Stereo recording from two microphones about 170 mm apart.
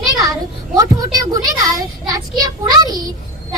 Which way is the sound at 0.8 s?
20° right (ahead or behind).